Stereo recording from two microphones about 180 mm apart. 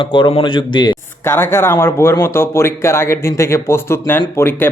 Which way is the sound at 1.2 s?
10° left (ahead or behind).